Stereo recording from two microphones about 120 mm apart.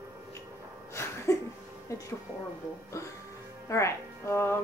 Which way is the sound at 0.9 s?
25° left (ahead or behind).